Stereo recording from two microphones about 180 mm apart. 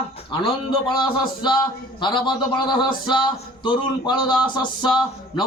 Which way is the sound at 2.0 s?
25° left (ahead or behind).